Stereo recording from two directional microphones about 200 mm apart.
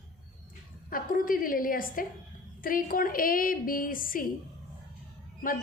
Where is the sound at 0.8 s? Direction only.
45° left (ahead or behind).